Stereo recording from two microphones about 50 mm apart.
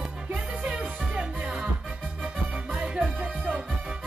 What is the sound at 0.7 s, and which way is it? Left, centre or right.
Music, centre.